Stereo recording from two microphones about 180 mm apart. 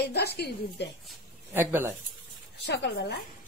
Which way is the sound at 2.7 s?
70° left (ahead or behind).